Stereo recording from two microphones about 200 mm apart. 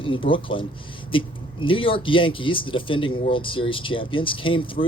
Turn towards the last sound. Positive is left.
turn(degrees=25)  # may be behind; listen again after turning